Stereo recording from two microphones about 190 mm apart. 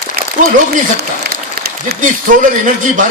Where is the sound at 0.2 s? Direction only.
55° right (ahead or behind).